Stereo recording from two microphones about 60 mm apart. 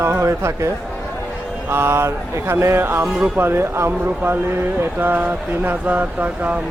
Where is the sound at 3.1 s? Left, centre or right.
Right.